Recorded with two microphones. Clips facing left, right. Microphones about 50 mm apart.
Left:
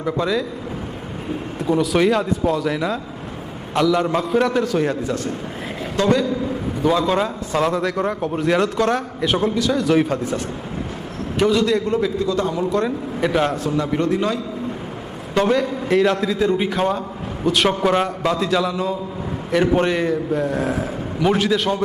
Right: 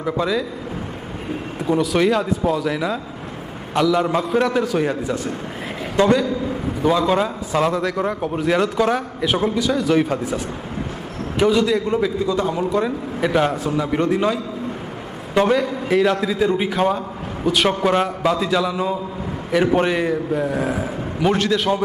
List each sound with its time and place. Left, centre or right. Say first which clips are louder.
0.0 s a man's voice: even; centre
1.5 s a man's voice: even; centre
6.0 s a man's voice: right 2 dB; right
6.8 s a man's voice: right 1 dB; centre
15.4 s a man's voice: right 1 dB; centre